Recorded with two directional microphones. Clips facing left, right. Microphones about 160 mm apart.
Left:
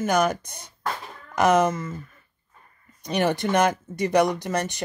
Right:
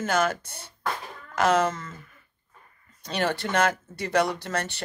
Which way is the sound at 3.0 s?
15° left (ahead or behind).